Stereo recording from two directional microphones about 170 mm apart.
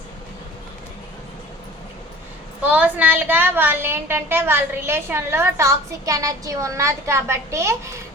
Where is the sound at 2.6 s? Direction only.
10° right (ahead or behind).